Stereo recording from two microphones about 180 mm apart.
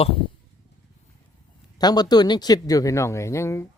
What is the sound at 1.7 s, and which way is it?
Speech, 20° left (ahead or behind).